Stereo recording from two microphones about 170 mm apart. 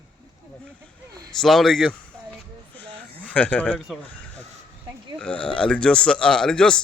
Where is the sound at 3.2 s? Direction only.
10° left (ahead or behind).